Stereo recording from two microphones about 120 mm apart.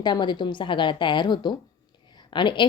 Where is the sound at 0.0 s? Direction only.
35° left (ahead or behind).